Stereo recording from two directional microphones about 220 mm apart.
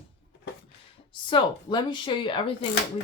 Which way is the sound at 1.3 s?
20° left (ahead or behind).